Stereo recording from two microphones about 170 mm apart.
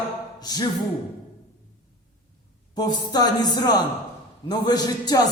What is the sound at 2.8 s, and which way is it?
A man's voice, 25° left (ahead or behind).